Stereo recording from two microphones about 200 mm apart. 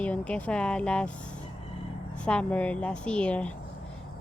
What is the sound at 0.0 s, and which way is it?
Speech, 5° left (ahead or behind).